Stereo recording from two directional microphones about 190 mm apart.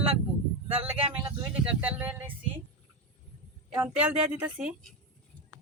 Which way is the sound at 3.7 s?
10° right (ahead or behind).